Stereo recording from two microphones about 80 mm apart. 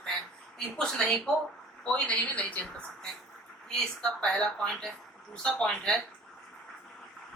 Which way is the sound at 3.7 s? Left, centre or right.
Centre.